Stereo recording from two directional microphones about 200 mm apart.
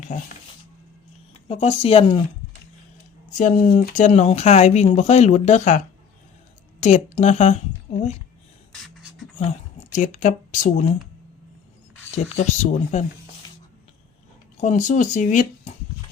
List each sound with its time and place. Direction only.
0.1 s speech: 40° left (ahead or behind)
1.3 s speech: 30° left (ahead or behind)
3.3 s speech: 40° left (ahead or behind)
8.7 s beatboxing: centre (ahead or behind)
9.4 s speech: 35° left (ahead or behind)
12.1 s speech: 35° left (ahead or behind)
14.6 s speech: 35° left (ahead or behind)